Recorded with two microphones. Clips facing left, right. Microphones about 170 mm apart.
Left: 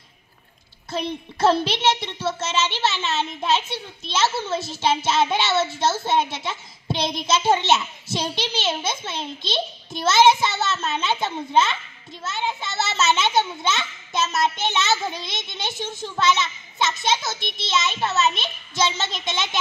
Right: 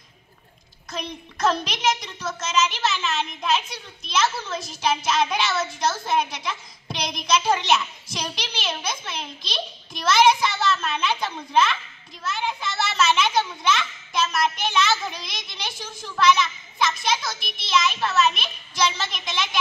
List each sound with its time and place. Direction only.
0.8 s a child's voice: 30° left (ahead or behind)